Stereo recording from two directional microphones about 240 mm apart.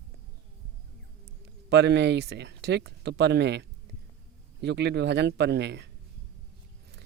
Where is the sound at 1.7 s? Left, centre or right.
Right.